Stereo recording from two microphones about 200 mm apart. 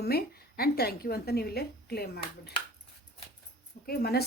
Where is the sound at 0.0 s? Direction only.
50° left (ahead or behind).